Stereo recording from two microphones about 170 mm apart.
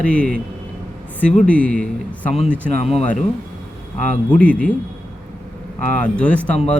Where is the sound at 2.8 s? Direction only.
40° left (ahead or behind).